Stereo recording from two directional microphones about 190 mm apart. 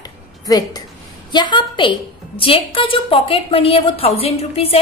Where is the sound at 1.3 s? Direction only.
25° left (ahead or behind).